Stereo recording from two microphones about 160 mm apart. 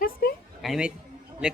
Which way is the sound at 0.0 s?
75° left (ahead or behind).